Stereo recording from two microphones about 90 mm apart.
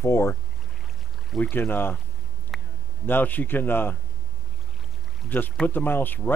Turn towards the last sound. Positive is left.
turn(degrees=20)  # may be behind; listen again after turning